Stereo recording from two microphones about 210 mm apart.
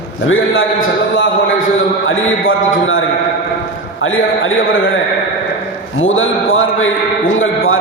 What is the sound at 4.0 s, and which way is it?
Speech, 70° left (ahead or behind).